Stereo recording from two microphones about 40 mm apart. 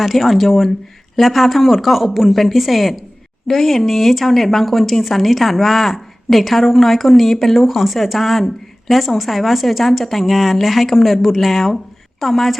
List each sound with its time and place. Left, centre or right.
0.0 s speech: centre